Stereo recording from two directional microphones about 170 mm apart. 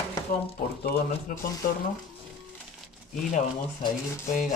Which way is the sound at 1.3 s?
50° left (ahead or behind).